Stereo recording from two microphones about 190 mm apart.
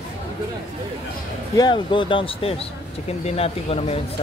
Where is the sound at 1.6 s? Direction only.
25° left (ahead or behind).